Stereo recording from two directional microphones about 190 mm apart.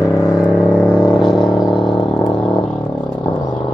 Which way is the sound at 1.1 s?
Centre (ahead or behind).